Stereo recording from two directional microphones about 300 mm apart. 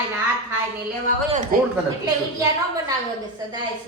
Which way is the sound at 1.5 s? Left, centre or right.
Right.